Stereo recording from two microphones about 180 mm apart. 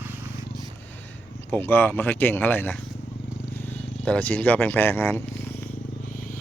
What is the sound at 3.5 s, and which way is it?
Vehicle, 10° left (ahead or behind).